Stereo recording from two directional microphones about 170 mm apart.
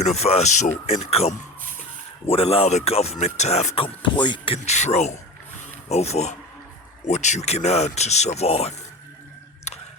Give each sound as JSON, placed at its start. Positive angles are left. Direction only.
{"t": 0.0, "sound": "speech", "side_deg": 40}